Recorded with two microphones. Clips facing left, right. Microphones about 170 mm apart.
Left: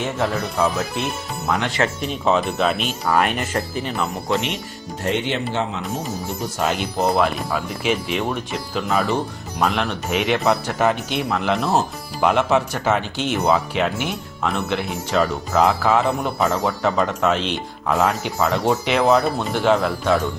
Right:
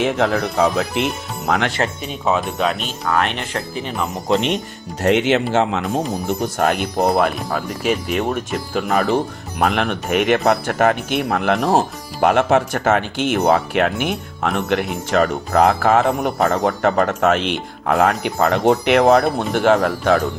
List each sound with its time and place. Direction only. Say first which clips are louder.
0.0 s speech: right 5 dB; 90° right
2.2 s speech: even; centre (ahead or behind)
4.1 s speech: right 4 dB; 25° right (ahead or behind)
5.0 s speech: right 7 dB; 90° right
6.4 s speech: right 3 dB; 50° right (ahead or behind)